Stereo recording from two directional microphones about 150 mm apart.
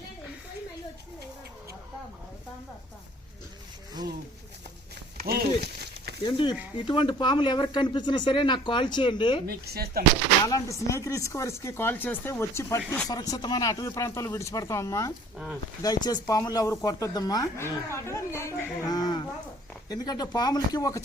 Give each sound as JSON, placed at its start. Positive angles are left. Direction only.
{"t": 5.1, "sound": "a sound", "side_deg": -90}
{"t": 6.2, "sound": "speech", "side_deg": 35}
{"t": 9.5, "sound": "speech", "side_deg": -90}
{"t": 10.4, "sound": "speech", "side_deg": 20}